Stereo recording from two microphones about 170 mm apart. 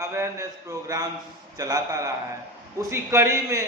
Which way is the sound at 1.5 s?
20° right (ahead or behind).